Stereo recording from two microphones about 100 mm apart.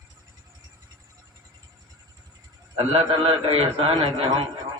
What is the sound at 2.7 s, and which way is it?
A man's voice, 65° right (ahead or behind).